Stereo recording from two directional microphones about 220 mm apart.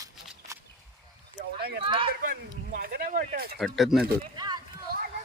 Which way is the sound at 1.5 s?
45° right (ahead or behind).